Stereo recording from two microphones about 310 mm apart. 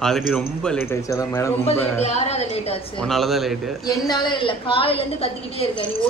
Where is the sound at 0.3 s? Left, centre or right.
Centre.